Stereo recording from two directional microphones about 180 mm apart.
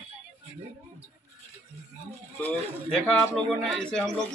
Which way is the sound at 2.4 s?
5° left (ahead or behind).